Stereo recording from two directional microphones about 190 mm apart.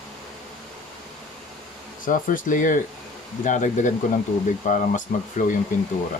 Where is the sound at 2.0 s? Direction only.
45° left (ahead or behind).